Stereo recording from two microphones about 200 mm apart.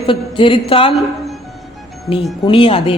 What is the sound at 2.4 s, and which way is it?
Speech, 25° left (ahead or behind).